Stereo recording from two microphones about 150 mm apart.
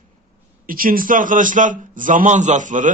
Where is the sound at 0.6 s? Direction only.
70° right (ahead or behind).